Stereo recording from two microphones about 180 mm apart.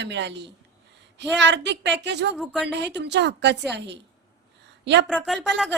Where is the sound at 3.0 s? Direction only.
75° right (ahead or behind).